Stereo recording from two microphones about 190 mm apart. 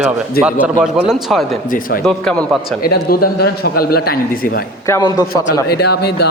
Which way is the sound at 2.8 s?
55° left (ahead or behind).